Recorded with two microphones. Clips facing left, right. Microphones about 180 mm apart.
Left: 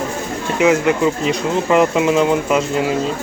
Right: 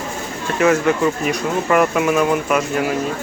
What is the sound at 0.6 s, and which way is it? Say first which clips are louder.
Speech: left 1 dB; 15° left (ahead or behind).